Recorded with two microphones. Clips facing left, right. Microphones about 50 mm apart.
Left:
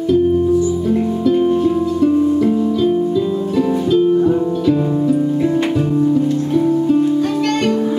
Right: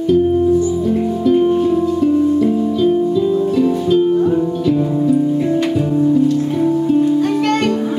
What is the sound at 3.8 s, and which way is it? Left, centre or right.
Music, centre.